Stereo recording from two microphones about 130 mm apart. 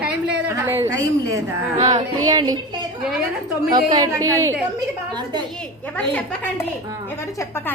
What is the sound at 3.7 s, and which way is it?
Speech, 30° right (ahead or behind).